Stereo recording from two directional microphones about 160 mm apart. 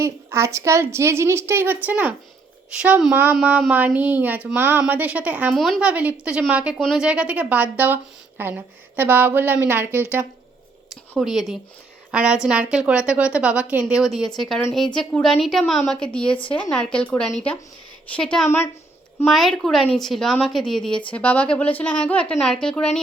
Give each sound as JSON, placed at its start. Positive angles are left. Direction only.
{"t": 0.0, "sound": "a woman's voice", "side_deg": -15}
{"t": 5.5, "sound": "a woman's voice", "side_deg": 0}
{"t": 11.2, "sound": "a woman's voice", "side_deg": 0}
{"t": 19.3, "sound": "a woman's voice", "side_deg": 0}